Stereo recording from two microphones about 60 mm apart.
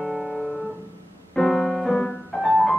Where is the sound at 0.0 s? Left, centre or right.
Centre.